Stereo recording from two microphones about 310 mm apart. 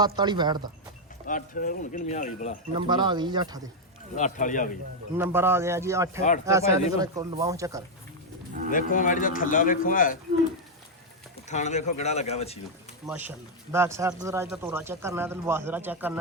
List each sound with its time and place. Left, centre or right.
0.0 s speech: centre
1.3 s speech: left
2.7 s speech: centre
4.1 s speech: left
5.1 s speech: centre
8.7 s speech: left
11.4 s speech: left
13.1 s speech: centre